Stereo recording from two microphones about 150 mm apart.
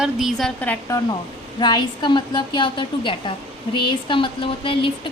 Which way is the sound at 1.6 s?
30° left (ahead or behind).